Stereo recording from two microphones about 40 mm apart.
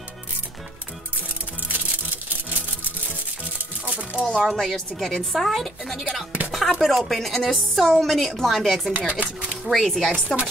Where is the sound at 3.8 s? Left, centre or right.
Right.